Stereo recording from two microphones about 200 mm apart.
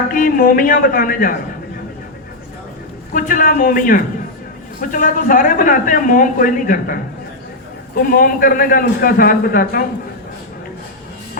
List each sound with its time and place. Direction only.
0.1 s a man's voice: 45° left (ahead or behind)
3.1 s a man's voice: 45° left (ahead or behind)